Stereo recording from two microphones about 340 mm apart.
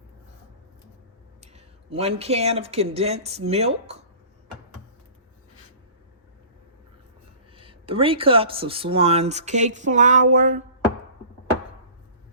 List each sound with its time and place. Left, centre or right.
1.4 s speech: centre
7.5 s speech: centre
10.3 s a sound: right